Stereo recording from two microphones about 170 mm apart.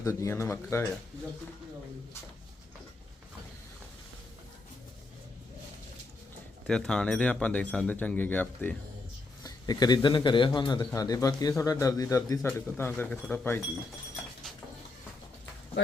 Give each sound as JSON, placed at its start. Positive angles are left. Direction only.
{"t": 0.0, "sound": "speech", "side_deg": 15}
{"t": 6.7, "sound": "speech", "side_deg": 5}
{"t": 9.4, "sound": "speech", "side_deg": 20}